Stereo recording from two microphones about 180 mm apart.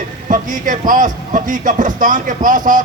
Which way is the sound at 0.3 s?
50° right (ahead or behind).